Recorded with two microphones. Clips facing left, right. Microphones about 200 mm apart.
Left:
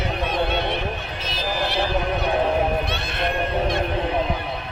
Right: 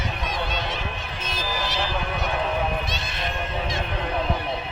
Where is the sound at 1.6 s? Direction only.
60° left (ahead or behind).